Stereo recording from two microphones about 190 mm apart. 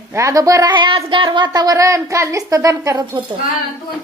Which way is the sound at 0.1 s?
15° right (ahead or behind).